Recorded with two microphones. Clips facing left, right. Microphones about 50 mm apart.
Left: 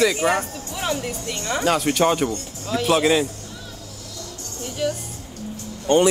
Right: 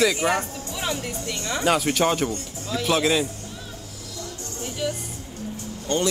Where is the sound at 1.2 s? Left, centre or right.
Left.